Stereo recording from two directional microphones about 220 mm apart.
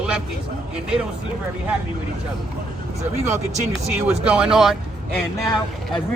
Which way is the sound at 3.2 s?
30° right (ahead or behind).